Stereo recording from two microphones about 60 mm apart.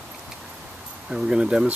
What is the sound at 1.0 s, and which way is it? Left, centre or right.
Speech, centre.